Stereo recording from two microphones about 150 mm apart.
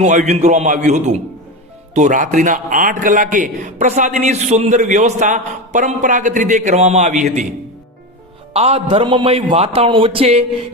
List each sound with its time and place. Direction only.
0.0 s a man's voice: 50° right (ahead or behind)
8.5 s a man's voice: 40° right (ahead or behind)